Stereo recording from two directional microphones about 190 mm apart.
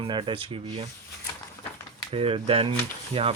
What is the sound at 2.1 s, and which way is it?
Speech, 30° right (ahead or behind).